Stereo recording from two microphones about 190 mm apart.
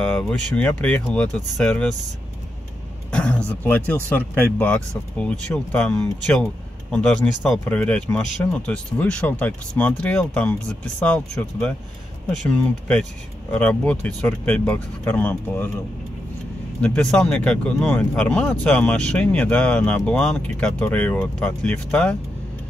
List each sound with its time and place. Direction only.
0.0 s speech: 5° left (ahead or behind)
3.1 s speech: 5° left (ahead or behind)
16.8 s speech: 5° left (ahead or behind)